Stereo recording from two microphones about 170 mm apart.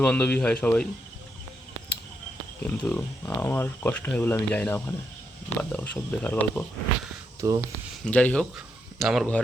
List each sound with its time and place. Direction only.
0.0 s speech: 10° left (ahead or behind)
2.6 s speech: 10° left (ahead or behind)
7.4 s speech: 20° right (ahead or behind)
8.0 s speech: 5° left (ahead or behind)